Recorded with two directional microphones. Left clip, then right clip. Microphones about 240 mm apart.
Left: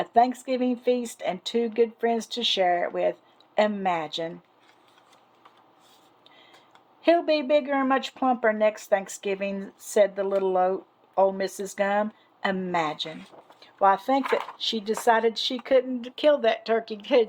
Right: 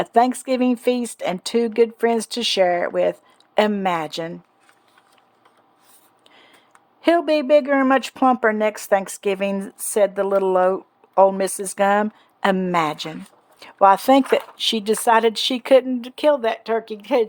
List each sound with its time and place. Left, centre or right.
0.0 s speech: right
7.0 s speech: right